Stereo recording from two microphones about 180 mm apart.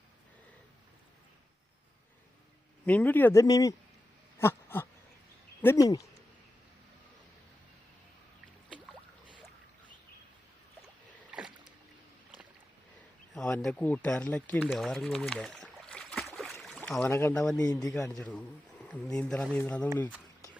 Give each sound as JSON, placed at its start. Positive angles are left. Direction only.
{"t": 2.8, "sound": "a man's voice", "side_deg": 10}
{"t": 4.4, "sound": "a sound", "side_deg": 15}
{"t": 5.6, "sound": "speech", "side_deg": 20}
{"t": 11.3, "sound": "rowboat", "side_deg": -5}
{"t": 13.3, "sound": "speech", "side_deg": 5}
{"t": 14.7, "sound": "a sound", "side_deg": 0}
{"t": 17.7, "sound": "speech", "side_deg": 20}
{"t": 18.2, "sound": "speech", "side_deg": 5}